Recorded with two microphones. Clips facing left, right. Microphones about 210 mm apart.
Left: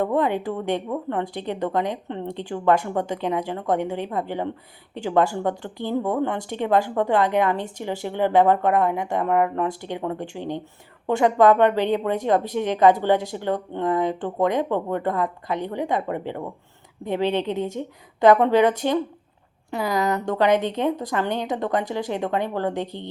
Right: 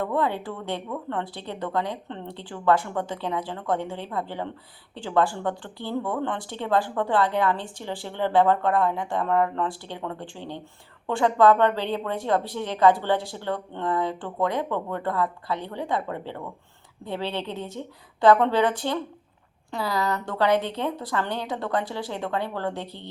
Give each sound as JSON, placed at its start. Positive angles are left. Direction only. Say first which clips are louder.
{"t": 0.0, "sound": "a woman's voice", "louder": "left 4 dB", "side_deg": 15}
{"t": 19.7, "sound": "a woman's voice", "louder": "left 4 dB", "side_deg": 20}